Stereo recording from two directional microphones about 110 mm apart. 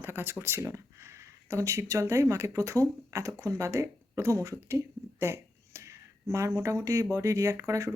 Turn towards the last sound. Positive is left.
turn(degrees=-30)  # may be behind; listen again after turning